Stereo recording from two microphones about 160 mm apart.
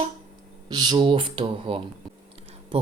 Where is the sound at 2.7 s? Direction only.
35° right (ahead or behind).